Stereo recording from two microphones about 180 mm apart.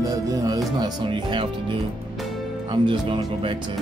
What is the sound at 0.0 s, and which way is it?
Music, 20° right (ahead or behind).